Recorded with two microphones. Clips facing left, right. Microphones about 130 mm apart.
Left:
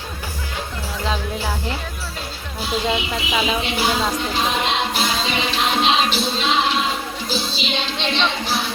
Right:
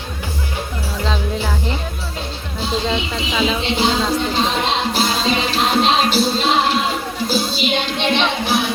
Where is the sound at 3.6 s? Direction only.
25° right (ahead or behind).